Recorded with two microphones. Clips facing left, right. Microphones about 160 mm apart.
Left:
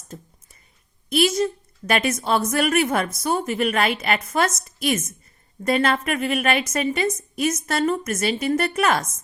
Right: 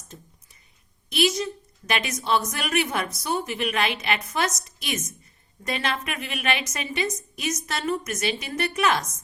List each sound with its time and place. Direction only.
1.1 s a woman's voice: 50° left (ahead or behind)